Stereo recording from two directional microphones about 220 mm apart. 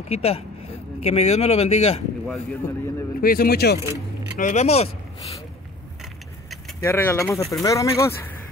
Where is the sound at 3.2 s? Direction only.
40° left (ahead or behind).